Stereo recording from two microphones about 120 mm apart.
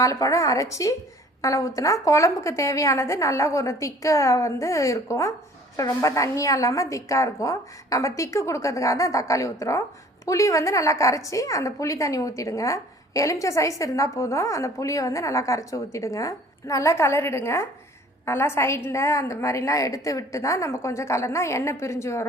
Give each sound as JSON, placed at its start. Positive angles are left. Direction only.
{"t": 0.0, "sound": "a woman's voice", "side_deg": 30}